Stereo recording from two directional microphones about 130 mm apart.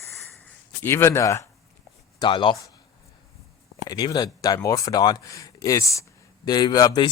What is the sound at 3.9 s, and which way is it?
Speech, 30° left (ahead or behind).